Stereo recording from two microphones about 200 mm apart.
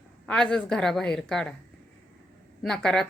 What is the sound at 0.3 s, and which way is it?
A woman's voice, 5° left (ahead or behind).